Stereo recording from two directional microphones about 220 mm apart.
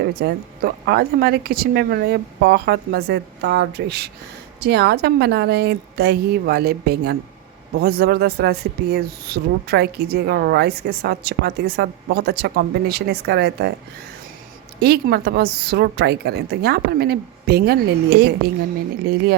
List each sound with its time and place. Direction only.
0.1 s speech: 45° right (ahead or behind)
14.8 s speech: 45° right (ahead or behind)